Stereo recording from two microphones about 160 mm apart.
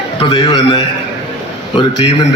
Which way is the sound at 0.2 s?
30° left (ahead or behind).